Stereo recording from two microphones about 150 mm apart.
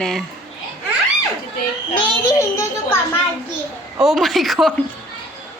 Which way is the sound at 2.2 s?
20° left (ahead or behind).